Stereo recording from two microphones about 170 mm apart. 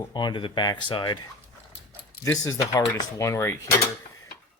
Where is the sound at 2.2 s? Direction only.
20° left (ahead or behind).